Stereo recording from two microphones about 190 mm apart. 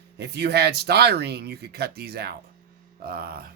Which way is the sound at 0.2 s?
60° right (ahead or behind).